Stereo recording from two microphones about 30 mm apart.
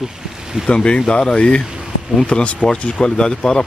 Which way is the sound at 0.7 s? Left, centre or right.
Left.